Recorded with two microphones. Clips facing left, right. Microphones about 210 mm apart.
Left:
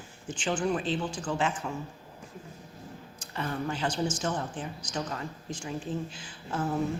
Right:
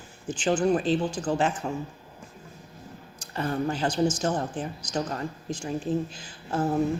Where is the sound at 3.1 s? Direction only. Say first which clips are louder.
Right 5 dB; 40° right (ahead or behind).